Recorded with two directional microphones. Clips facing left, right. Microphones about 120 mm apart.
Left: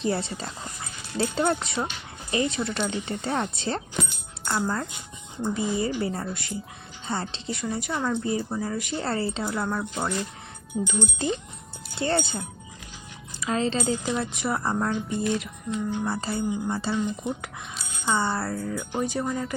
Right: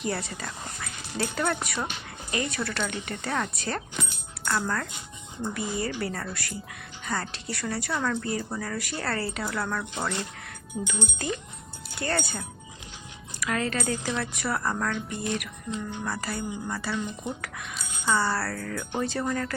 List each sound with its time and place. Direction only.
0.0 s speech: 25° left (ahead or behind)
18.9 s music: 10° left (ahead or behind)